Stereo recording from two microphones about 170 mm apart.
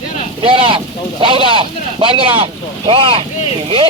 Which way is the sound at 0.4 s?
30° right (ahead or behind).